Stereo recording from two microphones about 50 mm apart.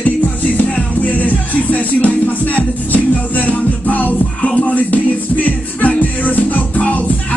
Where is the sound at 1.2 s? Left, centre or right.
Left.